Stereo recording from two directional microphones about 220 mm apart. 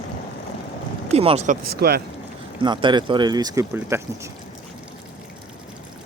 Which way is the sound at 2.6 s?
20° right (ahead or behind).